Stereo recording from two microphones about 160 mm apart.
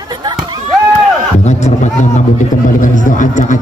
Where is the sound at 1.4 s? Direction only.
45° left (ahead or behind).